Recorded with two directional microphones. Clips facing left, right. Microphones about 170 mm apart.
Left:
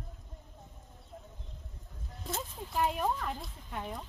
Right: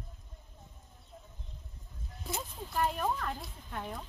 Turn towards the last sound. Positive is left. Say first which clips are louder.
# left 1 dB
turn(degrees=5)  # may be behind; listen again after turning